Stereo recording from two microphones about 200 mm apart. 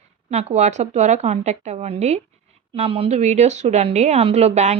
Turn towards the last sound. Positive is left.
turn(degrees=-35)  # may be behind; listen again after turning